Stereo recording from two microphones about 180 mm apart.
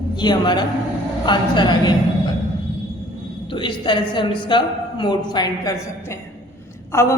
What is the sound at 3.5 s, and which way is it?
A woman's voice, 25° left (ahead or behind).